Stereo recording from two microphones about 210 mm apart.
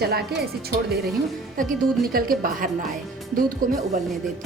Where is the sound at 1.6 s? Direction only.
40° right (ahead or behind).